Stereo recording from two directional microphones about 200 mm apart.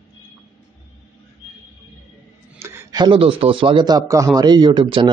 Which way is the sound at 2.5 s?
15° right (ahead or behind).